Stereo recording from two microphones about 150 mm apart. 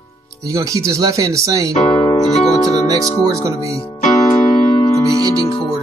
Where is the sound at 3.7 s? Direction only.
40° left (ahead or behind).